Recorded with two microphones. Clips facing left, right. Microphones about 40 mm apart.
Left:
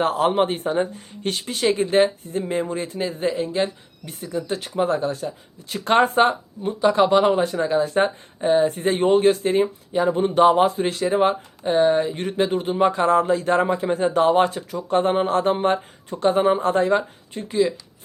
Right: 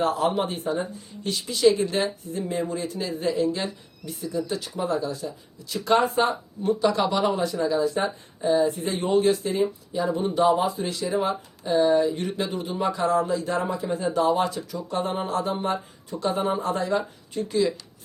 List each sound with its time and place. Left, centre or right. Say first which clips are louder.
0.0 s speech: left 4 dB; left
6.6 s speech: left 4 dB; left